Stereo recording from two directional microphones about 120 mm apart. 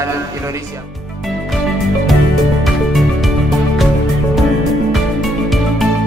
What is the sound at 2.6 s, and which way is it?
Music, centre (ahead or behind).